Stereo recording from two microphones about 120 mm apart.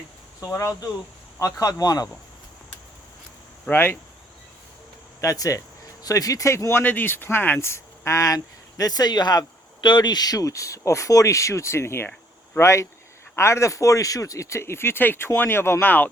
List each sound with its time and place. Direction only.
0.3 s speech: 25° left (ahead or behind)
3.7 s speech: 20° left (ahead or behind)
5.2 s speech: 25° left (ahead or behind)